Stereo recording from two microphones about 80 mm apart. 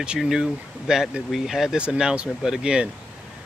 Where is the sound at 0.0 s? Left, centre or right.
Centre.